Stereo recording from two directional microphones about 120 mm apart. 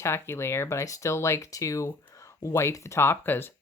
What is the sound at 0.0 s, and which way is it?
Speech, 20° left (ahead or behind).